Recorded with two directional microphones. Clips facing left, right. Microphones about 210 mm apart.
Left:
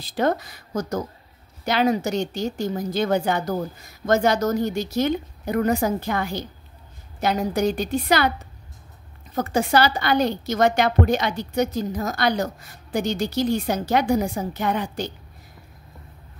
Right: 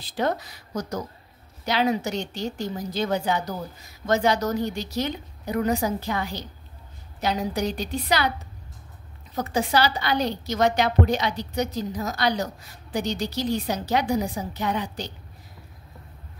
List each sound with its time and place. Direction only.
0.0 s a woman's voice: 50° left (ahead or behind)
9.3 s a woman's voice: 50° left (ahead or behind)